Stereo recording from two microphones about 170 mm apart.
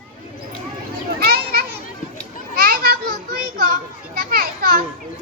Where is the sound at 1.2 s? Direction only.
70° right (ahead or behind).